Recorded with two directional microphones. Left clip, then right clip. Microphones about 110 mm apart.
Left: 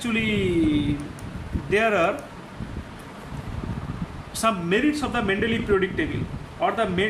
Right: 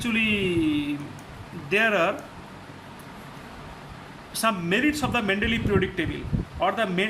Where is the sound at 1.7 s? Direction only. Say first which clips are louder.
Left 1 dB; 20° right (ahead or behind).